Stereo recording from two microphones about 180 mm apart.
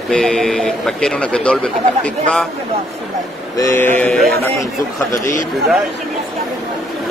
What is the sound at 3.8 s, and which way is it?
Speech, 5° left (ahead or behind).